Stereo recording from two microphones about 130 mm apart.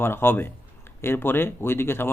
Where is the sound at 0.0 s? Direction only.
15° left (ahead or behind).